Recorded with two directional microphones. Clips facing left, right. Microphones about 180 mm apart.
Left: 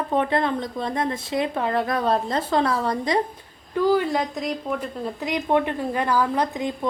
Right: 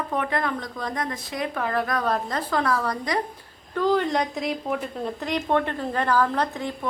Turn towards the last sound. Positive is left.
turn(degrees=15)  # may be behind; listen again after turning